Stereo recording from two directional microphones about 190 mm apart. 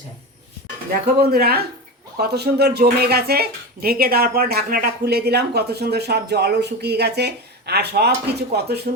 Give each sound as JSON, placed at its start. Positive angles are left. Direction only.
{"t": 1.2, "sound": "speech", "side_deg": -55}